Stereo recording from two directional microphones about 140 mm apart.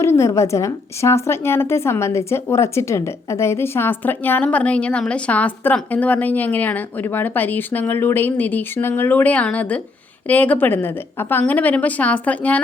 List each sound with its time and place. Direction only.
0.0 s a woman's voice: 20° left (ahead or behind)